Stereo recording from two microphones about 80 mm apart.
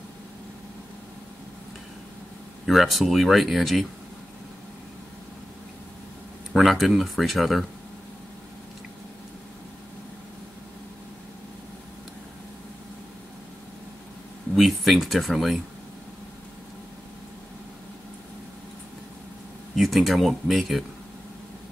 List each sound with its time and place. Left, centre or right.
2.6 s speech: centre
6.5 s speech: centre
14.5 s speech: centre
19.7 s speech: centre